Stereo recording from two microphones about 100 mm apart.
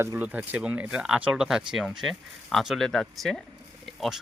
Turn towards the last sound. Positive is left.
turn(degrees=0)  # may be behind; listen again after turning